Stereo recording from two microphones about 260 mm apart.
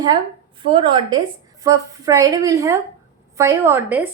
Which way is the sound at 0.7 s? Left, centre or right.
Centre.